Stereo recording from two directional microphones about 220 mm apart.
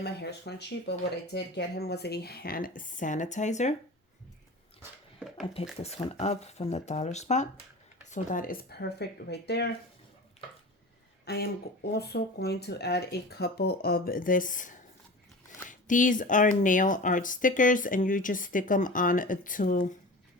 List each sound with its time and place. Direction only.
0.0 s speech: 50° left (ahead or behind); by 3.8 s 30° left (ahead or behind)
4.8 s a sound: centre (ahead or behind)
5.8 s speech: 30° left (ahead or behind); by 9.6 s 50° left (ahead or behind)
11.3 s speech: 45° left (ahead or behind)